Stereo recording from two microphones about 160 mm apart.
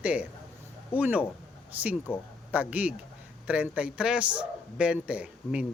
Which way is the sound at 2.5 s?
10° right (ahead or behind).